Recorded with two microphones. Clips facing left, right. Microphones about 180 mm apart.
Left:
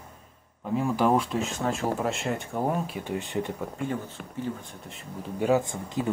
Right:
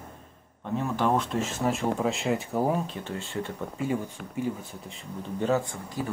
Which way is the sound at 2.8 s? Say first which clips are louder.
Left 3 dB; 10° left (ahead or behind).